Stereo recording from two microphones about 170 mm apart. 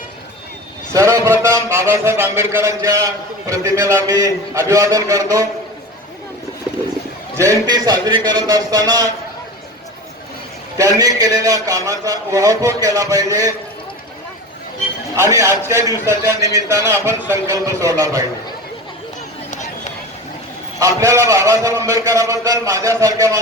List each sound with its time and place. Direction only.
0.9 s a man's voice: 15° right (ahead or behind)
7.3 s a man's voice: 20° right (ahead or behind)
10.8 s a man's voice: 20° right (ahead or behind)
15.1 s a man's voice: 15° right (ahead or behind)
20.7 s a man's voice: 20° right (ahead or behind)